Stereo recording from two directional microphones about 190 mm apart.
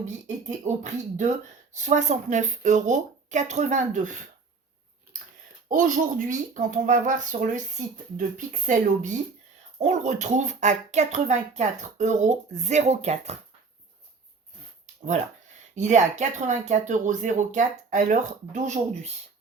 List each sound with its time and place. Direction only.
0.0 s speech: 40° right (ahead or behind)
5.6 s speech: 45° right (ahead or behind)
15.7 s speech: 40° right (ahead or behind)